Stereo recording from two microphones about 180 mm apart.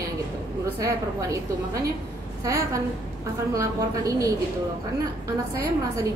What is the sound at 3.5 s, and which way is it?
Speech, 20° right (ahead or behind).